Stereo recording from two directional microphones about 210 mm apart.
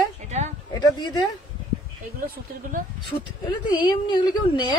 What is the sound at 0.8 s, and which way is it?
Speech, 20° left (ahead or behind).